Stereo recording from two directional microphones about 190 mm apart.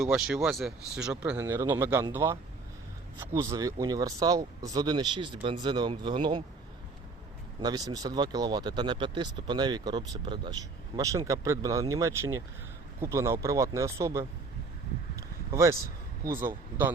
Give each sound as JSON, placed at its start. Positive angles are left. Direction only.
{"t": 0.0, "sound": "speech", "side_deg": 0}
{"t": 7.6, "sound": "speech", "side_deg": -20}
{"t": 15.1, "sound": "a sound", "side_deg": -15}
{"t": 16.2, "sound": "speech", "side_deg": -15}